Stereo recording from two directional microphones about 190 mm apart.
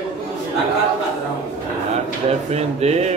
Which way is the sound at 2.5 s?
35° right (ahead or behind).